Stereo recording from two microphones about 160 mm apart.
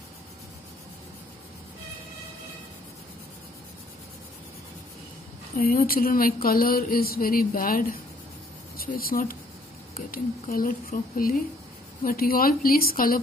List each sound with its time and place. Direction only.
5.6 s speech: 65° left (ahead or behind)